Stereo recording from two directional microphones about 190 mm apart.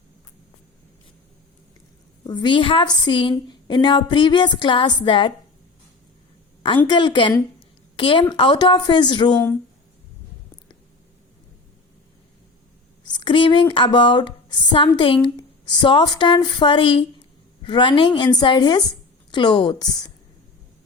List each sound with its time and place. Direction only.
2.2 s speech: 25° left (ahead or behind)
6.8 s speech: 25° left (ahead or behind)
13.1 s speech: 25° left (ahead or behind)